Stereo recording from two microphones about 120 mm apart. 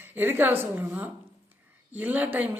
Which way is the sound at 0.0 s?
15° right (ahead or behind).